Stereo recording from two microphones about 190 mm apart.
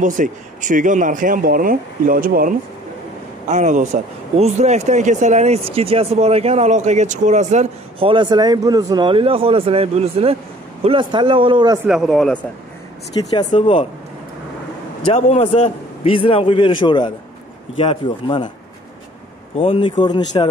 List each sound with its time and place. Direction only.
0.0 s speech: 40° right (ahead or behind); by 11.8 s 25° right (ahead or behind)
11.8 s speech: 5° right (ahead or behind)
13.1 s a man's voice: 20° left (ahead or behind)
15.1 s a man's voice: 35° left (ahead or behind)
19.5 s a man's voice: 30° left (ahead or behind)